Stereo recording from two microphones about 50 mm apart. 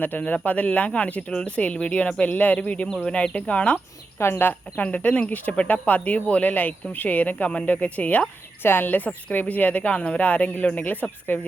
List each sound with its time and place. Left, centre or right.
0.4 s speech: left
2.3 s speech: left
4.2 s speech: left
4.8 s a woman's voice: left
8.6 s a woman's voice: left
10.8 s a woman's voice: left